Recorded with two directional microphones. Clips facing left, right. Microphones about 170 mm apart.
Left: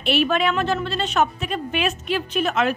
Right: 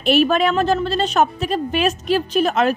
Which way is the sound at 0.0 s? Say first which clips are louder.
Right 4 dB; 40° right (ahead or behind).